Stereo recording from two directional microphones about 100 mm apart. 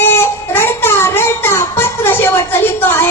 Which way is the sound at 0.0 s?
25° left (ahead or behind).